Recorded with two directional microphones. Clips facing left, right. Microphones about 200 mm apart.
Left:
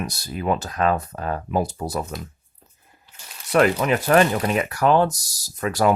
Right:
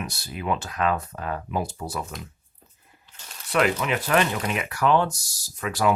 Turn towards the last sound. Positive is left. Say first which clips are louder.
# left 4 dB
turn(degrees=40)  # may be behind; listen again after turning